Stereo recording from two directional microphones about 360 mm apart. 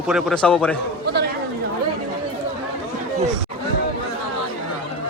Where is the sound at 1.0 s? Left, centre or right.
Right.